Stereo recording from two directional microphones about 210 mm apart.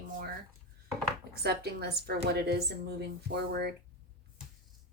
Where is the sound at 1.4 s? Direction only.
50° right (ahead or behind).